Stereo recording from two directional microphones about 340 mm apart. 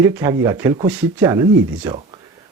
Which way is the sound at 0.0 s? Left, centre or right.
Centre.